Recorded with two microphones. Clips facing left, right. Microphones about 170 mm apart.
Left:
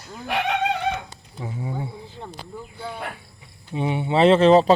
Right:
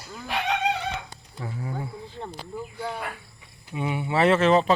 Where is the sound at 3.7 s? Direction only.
25° left (ahead or behind).